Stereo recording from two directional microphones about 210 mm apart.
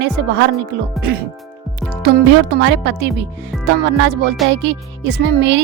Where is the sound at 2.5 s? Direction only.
55° right (ahead or behind).